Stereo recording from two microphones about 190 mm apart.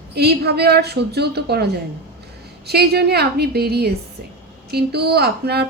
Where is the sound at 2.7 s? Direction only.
55° right (ahead or behind).